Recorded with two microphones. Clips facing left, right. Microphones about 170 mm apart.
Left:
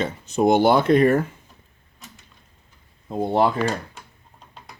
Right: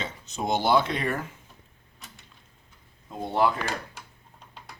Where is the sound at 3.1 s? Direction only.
35° left (ahead or behind).